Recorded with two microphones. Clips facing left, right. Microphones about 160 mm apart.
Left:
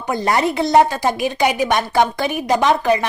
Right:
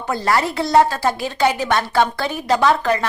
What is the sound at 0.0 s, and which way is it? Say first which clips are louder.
A woman's voice: left 1 dB; 20° left (ahead or behind).